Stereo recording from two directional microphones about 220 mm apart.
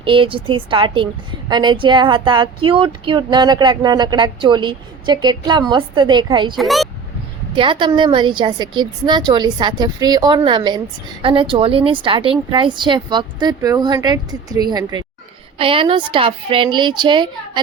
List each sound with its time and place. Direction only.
0.0 s speech: 25° right (ahead or behind)
6.6 s speech: centre (ahead or behind)
7.5 s speech: 20° right (ahead or behind)